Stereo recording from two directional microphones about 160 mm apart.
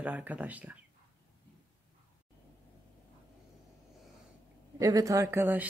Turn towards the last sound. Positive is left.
turn(degrees=-15)  # may be behind; listen again after turning